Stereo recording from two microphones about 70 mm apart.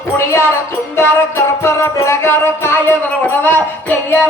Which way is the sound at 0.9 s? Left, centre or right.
Left.